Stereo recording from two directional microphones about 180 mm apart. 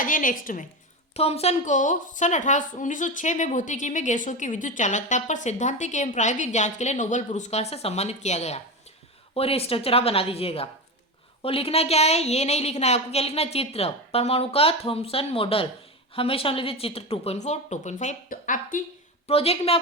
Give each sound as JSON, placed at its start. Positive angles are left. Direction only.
{"t": 0.0, "sound": "a woman's voice", "side_deg": 50}
{"t": 1.1, "sound": "a woman's voice", "side_deg": 35}
{"t": 19.3, "sound": "a woman's voice", "side_deg": 35}